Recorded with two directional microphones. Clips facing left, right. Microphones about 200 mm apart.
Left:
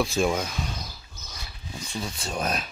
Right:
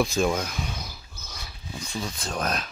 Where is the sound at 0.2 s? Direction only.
Centre (ahead or behind).